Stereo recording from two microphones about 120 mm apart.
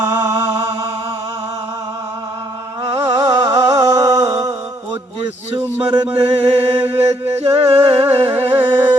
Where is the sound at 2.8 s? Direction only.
25° right (ahead or behind).